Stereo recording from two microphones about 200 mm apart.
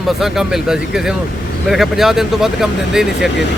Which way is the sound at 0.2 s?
Centre (ahead or behind).